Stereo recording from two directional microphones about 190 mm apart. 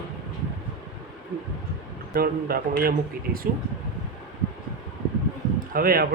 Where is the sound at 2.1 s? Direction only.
50° right (ahead or behind).